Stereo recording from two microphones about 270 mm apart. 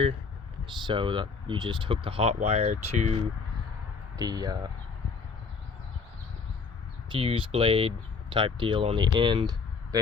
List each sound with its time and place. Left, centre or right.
0.8 s speech: centre
4.2 s speech: centre
7.1 s speech: centre